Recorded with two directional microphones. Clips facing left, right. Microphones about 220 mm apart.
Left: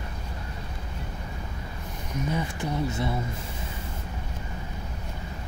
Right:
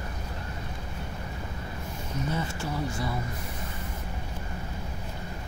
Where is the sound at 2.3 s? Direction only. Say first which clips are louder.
Left 4 dB; 15° left (ahead or behind).